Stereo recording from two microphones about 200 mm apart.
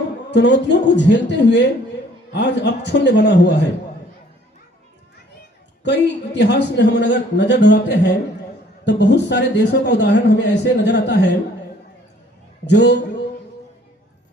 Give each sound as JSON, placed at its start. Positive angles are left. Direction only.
{"t": 0.3, "sound": "a man's voice", "side_deg": 60}
{"t": 5.8, "sound": "a man's voice", "side_deg": 60}
{"t": 12.6, "sound": "a man's voice", "side_deg": 60}